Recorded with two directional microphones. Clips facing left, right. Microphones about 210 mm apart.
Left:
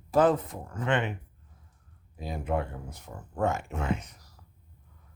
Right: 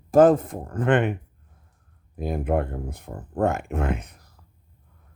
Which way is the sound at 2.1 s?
55° right (ahead or behind).